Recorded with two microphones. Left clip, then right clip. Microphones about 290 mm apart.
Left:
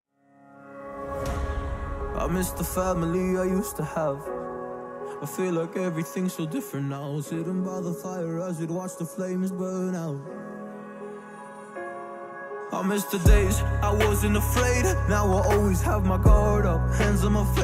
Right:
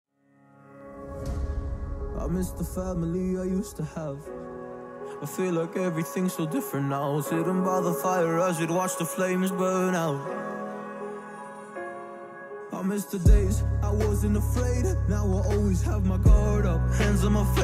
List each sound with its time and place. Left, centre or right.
2.1 s speech: left
5.4 s speech: centre; by 10.4 s right
12.7 s music: centre